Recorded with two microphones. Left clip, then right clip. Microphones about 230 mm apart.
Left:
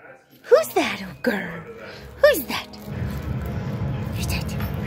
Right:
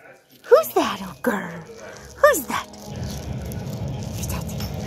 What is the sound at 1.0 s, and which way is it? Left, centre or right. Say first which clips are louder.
Speech: even; centre.